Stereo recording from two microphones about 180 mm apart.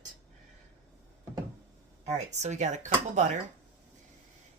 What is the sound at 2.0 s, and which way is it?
Speech, 40° right (ahead or behind).